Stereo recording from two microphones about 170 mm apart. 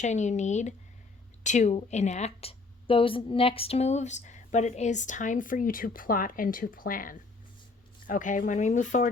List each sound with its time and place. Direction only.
0.0 s a woman's voice: 45° left (ahead or behind)